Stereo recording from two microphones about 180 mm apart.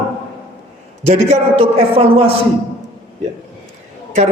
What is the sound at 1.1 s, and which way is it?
A man's voice, 35° right (ahead or behind).